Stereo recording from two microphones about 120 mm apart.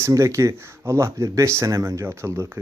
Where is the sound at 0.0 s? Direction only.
25° right (ahead or behind).